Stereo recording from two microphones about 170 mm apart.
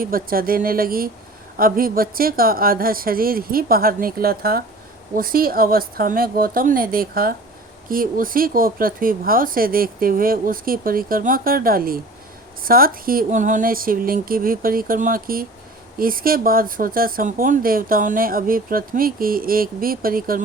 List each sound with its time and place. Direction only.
0.0 s speech: 55° right (ahead or behind)